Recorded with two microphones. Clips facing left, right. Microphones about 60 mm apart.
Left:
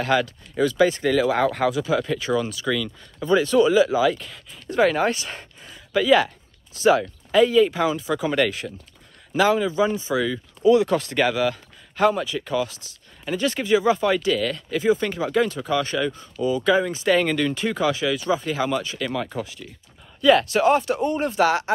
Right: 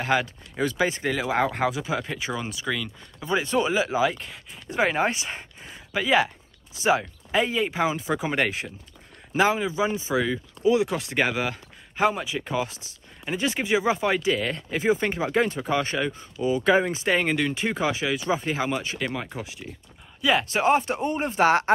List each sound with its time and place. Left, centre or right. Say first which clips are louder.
0.0 s speech: left 3 dB; right
20.2 s speech: left 6 dB; centre
20.4 s speech: left 3 dB; right